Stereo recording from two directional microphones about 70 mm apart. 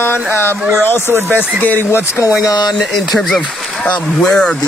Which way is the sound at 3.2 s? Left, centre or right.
Centre.